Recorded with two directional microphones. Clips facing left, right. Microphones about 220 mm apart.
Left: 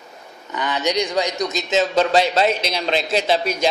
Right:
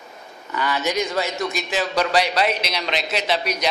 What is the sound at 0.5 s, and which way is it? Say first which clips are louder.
A man's voice: left 1 dB; 20° left (ahead or behind).